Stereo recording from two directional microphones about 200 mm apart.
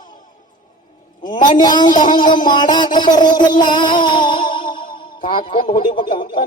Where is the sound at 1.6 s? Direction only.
20° left (ahead or behind).